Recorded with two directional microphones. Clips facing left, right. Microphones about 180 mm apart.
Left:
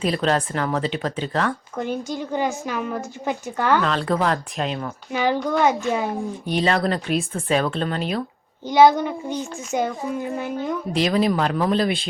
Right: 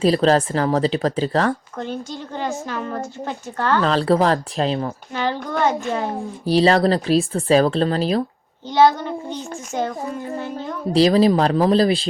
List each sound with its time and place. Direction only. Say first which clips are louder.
0.0 s speech: right 5 dB; 35° right (ahead or behind)
1.8 s a woman's voice: left 2 dB; 15° left (ahead or behind)
3.8 s speech: right 5 dB; 35° right (ahead or behind)
5.1 s a woman's voice: left 4 dB; 10° left (ahead or behind)
6.4 s speech: right 7 dB; 35° right (ahead or behind)
8.7 s a woman's voice: left 1 dB; 15° left (ahead or behind)
10.9 s speech: right 6 dB; 30° right (ahead or behind)